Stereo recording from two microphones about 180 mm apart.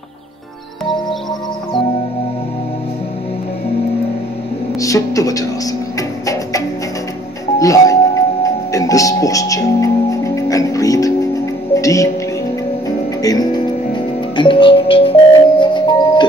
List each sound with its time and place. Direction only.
4.7 s a woman's voice: 20° left (ahead or behind)
5.9 s music: 20° left (ahead or behind)
8.7 s speech: 20° left (ahead or behind)
11.7 s music: 20° left (ahead or behind)